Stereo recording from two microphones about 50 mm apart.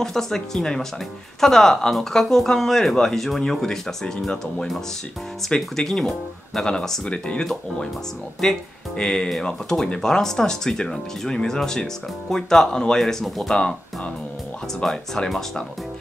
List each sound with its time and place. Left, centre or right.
0.0 s speech: centre
8.4 s speech: centre
13.5 s speech: centre
14.8 s speech: centre